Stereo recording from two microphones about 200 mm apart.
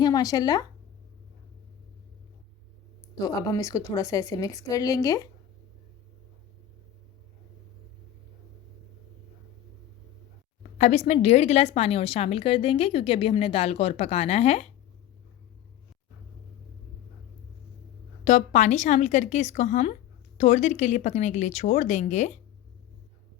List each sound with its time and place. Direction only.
0.0 s speech: 20° left (ahead or behind)
3.2 s a woman's voice: 20° left (ahead or behind)
10.6 s speech: 35° left (ahead or behind)
18.3 s speech: 35° left (ahead or behind)